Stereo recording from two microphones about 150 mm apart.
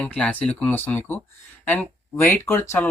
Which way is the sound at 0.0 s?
10° left (ahead or behind).